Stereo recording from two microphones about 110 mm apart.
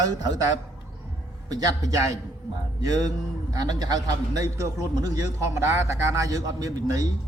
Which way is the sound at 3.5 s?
35° right (ahead or behind).